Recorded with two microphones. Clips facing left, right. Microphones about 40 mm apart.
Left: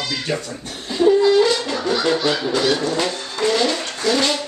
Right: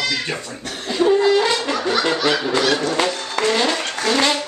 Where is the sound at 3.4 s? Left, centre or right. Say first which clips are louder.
Left 1 dB; right.